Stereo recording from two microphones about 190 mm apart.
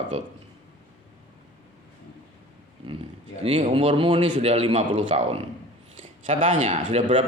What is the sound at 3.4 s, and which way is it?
A man's voice, 30° right (ahead or behind).